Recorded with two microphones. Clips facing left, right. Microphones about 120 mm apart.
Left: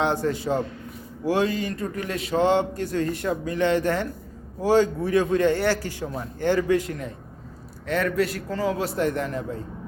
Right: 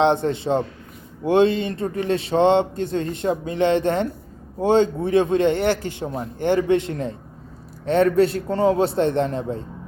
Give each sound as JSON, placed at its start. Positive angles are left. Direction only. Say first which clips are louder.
{"t": 0.0, "sound": "speech", "louder": "right 5 dB", "side_deg": -25}